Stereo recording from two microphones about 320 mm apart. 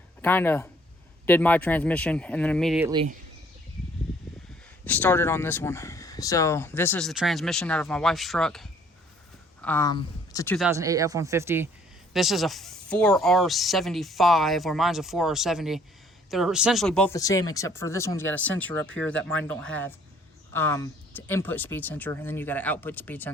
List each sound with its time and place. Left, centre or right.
0.2 s speech: centre
2.9 s speech: centre
4.9 s speech: centre
10.7 s speech: centre